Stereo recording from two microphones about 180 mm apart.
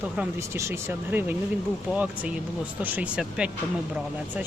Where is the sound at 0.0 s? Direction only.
10° right (ahead or behind).